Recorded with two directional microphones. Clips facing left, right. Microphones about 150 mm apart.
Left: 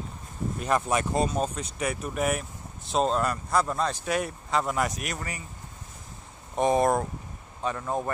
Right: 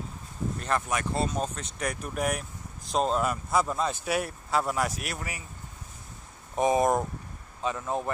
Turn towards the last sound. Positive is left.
turn(degrees=-5)  # may be behind; listen again after turning